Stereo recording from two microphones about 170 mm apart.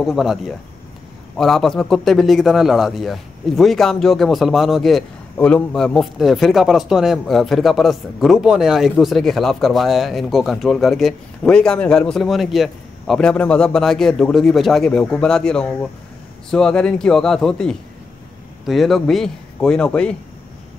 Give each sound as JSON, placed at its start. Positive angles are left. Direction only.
{"t": 0.0, "sound": "a man's voice", "side_deg": 0}